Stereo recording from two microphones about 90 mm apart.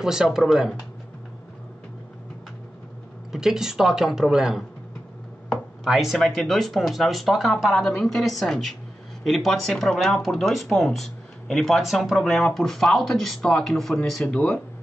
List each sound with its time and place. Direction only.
0.0 s speech: 5° right (ahead or behind)
3.3 s speech: 5° right (ahead or behind)